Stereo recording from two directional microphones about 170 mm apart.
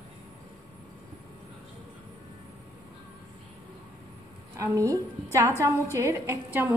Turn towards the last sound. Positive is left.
turn(degrees=-15)  # may be behind; listen again after turning